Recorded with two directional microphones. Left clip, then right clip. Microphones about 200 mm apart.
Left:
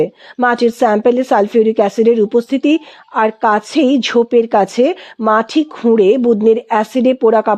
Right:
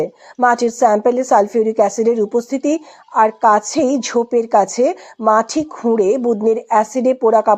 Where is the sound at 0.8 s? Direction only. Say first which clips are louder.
Left 1 dB; 35° left (ahead or behind).